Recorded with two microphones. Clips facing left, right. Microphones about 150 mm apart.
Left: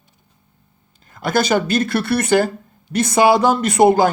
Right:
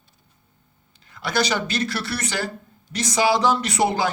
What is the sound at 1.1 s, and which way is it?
A man's voice, 50° left (ahead or behind).